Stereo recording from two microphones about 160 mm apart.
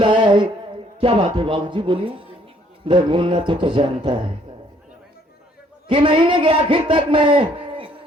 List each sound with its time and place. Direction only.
0.0 s a sound: 30° right (ahead or behind)
2.8 s a man's voice: 30° right (ahead or behind)
5.9 s a man's voice: 30° right (ahead or behind)